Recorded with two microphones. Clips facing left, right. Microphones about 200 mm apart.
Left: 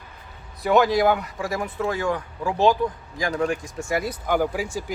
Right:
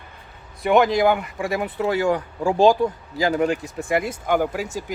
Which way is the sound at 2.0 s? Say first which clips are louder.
Right 4 dB; 40° right (ahead or behind).